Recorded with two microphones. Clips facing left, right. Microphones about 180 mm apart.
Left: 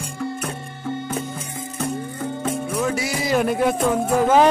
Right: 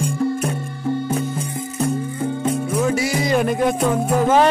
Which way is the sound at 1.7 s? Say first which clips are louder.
Right 5 dB; 20° right (ahead or behind).